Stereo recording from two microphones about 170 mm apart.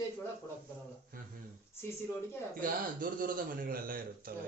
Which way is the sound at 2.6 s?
55° right (ahead or behind).